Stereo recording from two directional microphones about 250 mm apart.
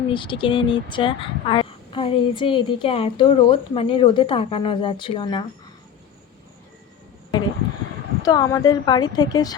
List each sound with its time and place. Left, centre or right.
0.1 s speech: centre
8.2 s a woman's voice: centre